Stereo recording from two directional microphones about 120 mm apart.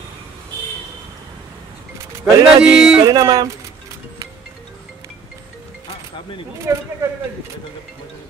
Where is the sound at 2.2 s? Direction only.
10° right (ahead or behind).